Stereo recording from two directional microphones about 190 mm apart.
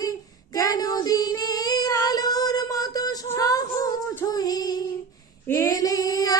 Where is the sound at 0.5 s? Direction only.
20° left (ahead or behind).